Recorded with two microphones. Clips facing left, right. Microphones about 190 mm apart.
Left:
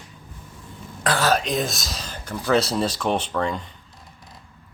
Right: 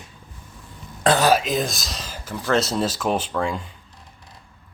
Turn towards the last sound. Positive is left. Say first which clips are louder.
# even
turn(degrees=-5)  # may be behind; listen again after turning